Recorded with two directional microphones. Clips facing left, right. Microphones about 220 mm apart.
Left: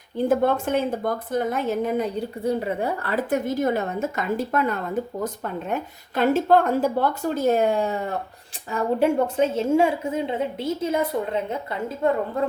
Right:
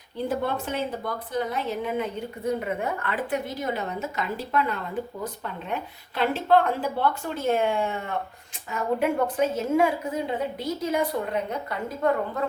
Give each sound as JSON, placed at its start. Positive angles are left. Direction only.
{"t": 0.3, "sound": "a woman's voice", "side_deg": 50}